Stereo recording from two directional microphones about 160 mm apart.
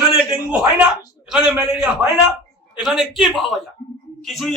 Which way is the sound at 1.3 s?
5° right (ahead or behind).